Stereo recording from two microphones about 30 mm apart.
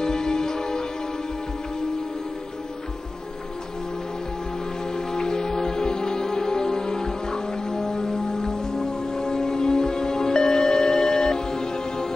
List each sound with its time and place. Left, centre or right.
0.0 s music: left
4.9 s music: left